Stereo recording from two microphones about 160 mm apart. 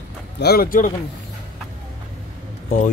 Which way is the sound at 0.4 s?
75° left (ahead or behind).